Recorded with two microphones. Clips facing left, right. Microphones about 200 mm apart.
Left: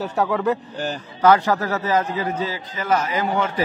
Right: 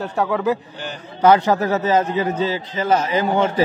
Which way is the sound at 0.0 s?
Centre (ahead or behind).